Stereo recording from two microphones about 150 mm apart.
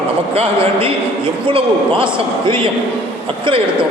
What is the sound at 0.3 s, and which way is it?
A man's voice, 40° right (ahead or behind).